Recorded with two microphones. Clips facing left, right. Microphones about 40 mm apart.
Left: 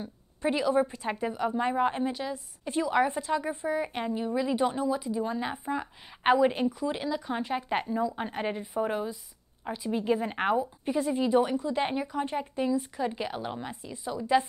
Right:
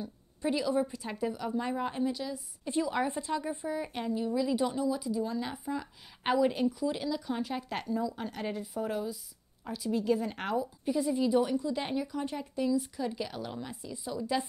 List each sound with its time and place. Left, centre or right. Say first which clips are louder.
0.0 s a woman's voice: left 3 dB; left